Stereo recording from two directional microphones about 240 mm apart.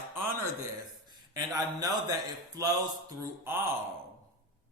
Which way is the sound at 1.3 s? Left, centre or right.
Centre.